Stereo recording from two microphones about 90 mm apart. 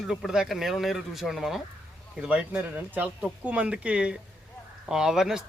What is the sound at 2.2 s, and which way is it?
Speech, 10° right (ahead or behind).